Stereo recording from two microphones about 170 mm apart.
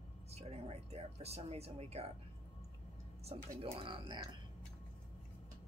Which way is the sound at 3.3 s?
35° right (ahead or behind).